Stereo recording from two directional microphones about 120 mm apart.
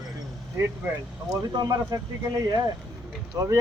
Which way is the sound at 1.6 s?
35° right (ahead or behind).